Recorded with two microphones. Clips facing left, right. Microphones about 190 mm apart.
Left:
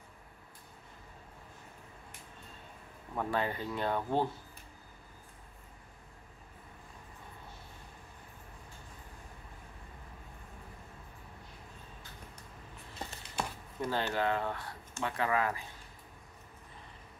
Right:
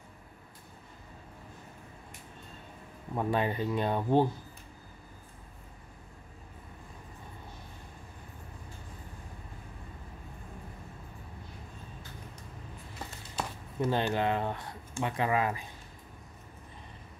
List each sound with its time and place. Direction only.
3.2 s speech: 20° right (ahead or behind)
13.7 s speech: 20° right (ahead or behind)